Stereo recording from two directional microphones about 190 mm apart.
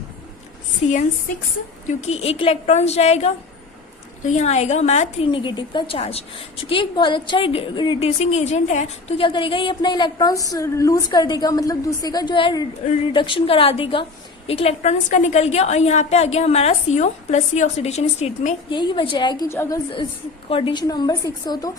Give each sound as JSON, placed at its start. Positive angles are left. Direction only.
{"t": 0.8, "sound": "a woman's voice", "side_deg": 35}
{"t": 18.8, "sound": "a woman's voice", "side_deg": 25}
{"t": 20.5, "sound": "a woman's voice", "side_deg": 30}